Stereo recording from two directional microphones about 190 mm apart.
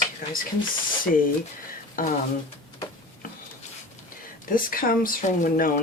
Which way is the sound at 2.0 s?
45° left (ahead or behind).